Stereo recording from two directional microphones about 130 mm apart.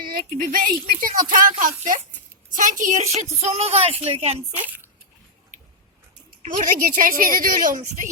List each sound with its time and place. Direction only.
0.0 s a woman's voice: 90° right; by 4.4 s 50° right (ahead or behind)
4.6 s speech: 15° right (ahead or behind)
6.4 s a woman's voice: 80° right